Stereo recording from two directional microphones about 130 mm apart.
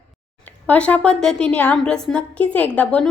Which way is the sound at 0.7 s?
10° left (ahead or behind).